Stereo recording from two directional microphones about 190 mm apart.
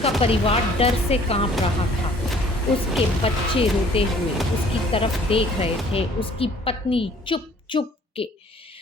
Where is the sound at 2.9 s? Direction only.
30° left (ahead or behind).